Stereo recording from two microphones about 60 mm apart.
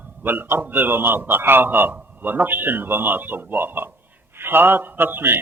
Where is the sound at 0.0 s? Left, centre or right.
Right.